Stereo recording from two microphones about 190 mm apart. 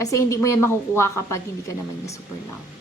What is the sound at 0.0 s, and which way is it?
A woman's voice, 15° left (ahead or behind).